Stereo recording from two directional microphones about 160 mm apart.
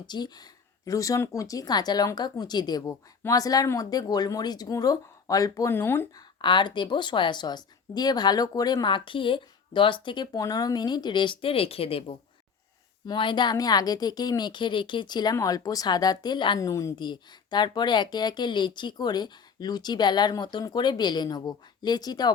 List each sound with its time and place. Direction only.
0.0 s a woman's voice: 25° left (ahead or behind)
6.4 s a woman's voice: 30° left (ahead or behind)